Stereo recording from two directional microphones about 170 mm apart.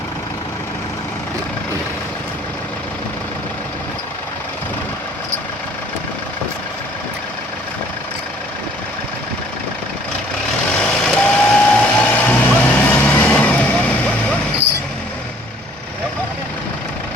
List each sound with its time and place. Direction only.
10.8 s vehicle: 5° left (ahead or behind)